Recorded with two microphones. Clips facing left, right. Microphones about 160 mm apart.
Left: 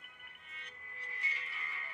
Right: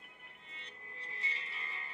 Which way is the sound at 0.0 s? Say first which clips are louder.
Right 2 dB; 25° right (ahead or behind).